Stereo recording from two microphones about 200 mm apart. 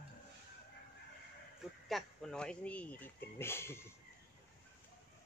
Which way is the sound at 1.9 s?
Centre (ahead or behind).